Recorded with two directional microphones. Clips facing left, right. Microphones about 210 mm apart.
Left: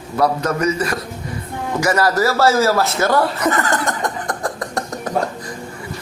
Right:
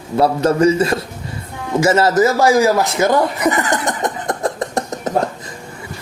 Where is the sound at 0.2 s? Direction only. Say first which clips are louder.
Right 4 dB; 30° right (ahead or behind).